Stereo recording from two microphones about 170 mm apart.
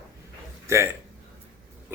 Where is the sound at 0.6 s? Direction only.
15° right (ahead or behind).